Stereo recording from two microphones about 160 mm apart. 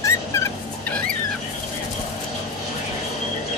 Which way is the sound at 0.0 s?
15° left (ahead or behind).